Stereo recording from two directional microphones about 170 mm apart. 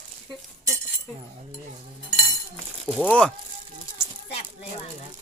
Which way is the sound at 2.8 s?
5° left (ahead or behind).